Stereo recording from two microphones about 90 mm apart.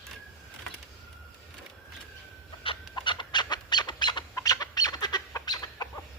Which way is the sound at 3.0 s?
60° left (ahead or behind).